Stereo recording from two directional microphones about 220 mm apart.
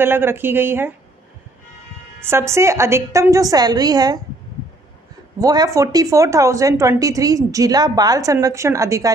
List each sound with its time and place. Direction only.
0.0 s speech: 10° right (ahead or behind)
2.1 s speech: 10° right (ahead or behind)
5.4 s speech: 15° right (ahead or behind)